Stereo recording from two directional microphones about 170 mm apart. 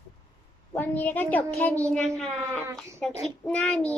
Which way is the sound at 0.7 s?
10° left (ahead or behind).